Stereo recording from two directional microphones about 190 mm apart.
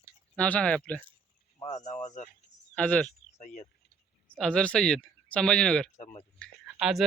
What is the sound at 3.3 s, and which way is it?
Speech, 40° left (ahead or behind).